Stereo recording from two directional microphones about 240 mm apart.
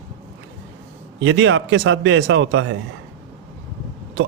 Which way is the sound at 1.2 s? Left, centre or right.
Right.